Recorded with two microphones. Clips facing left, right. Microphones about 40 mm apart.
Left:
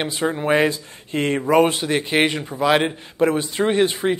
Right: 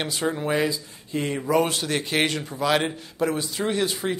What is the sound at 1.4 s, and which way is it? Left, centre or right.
A man's voice, left.